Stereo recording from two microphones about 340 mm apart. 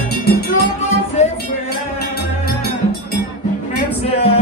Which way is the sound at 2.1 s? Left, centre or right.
Left.